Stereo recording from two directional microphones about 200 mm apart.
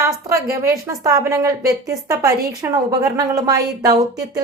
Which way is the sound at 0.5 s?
15° right (ahead or behind).